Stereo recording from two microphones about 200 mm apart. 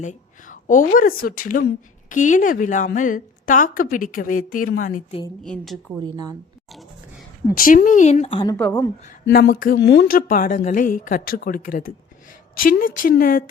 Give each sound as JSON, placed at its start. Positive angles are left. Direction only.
{"t": 0.0, "sound": "speech", "side_deg": 40}
{"t": 5.4, "sound": "a woman's voice", "side_deg": 0}
{"t": 6.0, "sound": "a woman's voice", "side_deg": -20}
{"t": 7.5, "sound": "speech", "side_deg": 45}
{"t": 9.3, "sound": "speech", "side_deg": 45}